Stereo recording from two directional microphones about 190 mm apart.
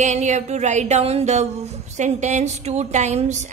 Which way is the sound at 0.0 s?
40° right (ahead or behind).